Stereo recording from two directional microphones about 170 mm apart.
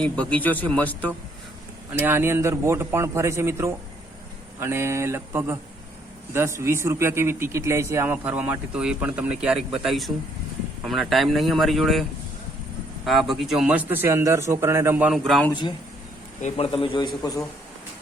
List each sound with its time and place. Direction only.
0.0 s a man's voice: 5° left (ahead or behind)
1.9 s a man's voice: 10° right (ahead or behind)
13.1 s a man's voice: centre (ahead or behind)
15.2 s speech: centre (ahead or behind)
16.4 s a man's voice: 35° left (ahead or behind)